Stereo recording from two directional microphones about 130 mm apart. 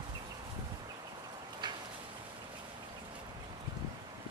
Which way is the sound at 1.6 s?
35° right (ahead or behind).